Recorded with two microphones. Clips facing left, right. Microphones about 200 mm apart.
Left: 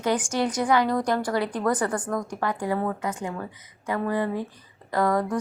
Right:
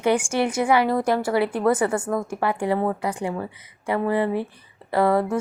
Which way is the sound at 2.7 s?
30° right (ahead or behind).